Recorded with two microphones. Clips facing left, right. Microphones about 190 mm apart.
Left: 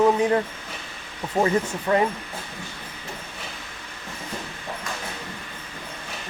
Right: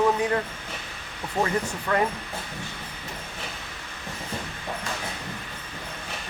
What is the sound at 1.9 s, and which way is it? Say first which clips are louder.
Speech: left 4 dB; 25° left (ahead or behind).